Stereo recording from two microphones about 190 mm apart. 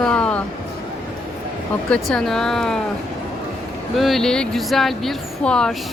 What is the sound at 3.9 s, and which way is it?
Speech, centre (ahead or behind).